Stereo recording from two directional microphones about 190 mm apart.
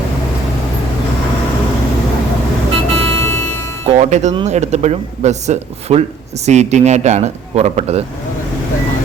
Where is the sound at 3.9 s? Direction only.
35° right (ahead or behind).